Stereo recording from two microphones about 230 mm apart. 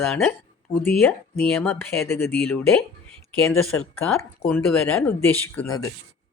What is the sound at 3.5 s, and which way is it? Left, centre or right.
Speech, left.